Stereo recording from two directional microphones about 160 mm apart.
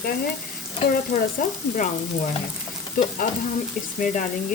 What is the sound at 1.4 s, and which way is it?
Speech, 55° left (ahead or behind).